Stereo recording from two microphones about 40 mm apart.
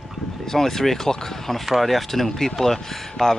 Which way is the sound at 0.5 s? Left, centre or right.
Centre.